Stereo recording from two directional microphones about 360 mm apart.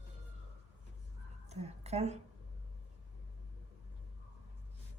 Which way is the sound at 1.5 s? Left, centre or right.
Centre.